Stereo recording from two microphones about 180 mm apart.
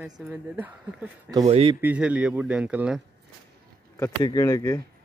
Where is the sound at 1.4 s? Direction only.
35° right (ahead or behind).